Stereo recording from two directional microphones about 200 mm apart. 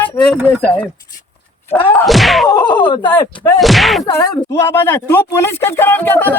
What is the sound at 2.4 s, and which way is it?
Speech, 25° left (ahead or behind).